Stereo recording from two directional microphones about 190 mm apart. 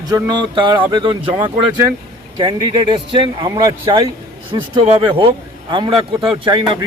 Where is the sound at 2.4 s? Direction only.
25° right (ahead or behind).